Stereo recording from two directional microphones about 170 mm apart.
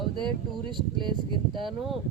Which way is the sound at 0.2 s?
Centre (ahead or behind).